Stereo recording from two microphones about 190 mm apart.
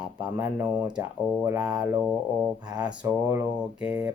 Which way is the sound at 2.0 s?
Centre (ahead or behind).